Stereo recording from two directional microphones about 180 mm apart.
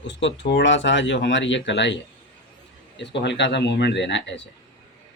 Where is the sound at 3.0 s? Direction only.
75° left (ahead or behind).